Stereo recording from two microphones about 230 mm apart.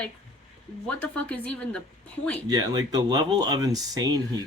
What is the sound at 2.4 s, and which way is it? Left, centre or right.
Speech, centre.